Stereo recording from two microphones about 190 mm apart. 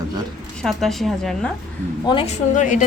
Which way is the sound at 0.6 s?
Centre (ahead or behind).